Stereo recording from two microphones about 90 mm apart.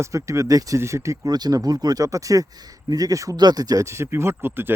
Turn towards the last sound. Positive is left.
turn(degrees=-25)  # may be behind; listen again after turning